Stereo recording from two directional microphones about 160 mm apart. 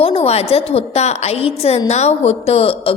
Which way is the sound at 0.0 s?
40° left (ahead or behind).